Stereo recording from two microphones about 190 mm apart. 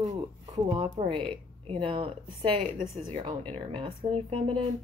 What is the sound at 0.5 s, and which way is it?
Speech, 30° right (ahead or behind).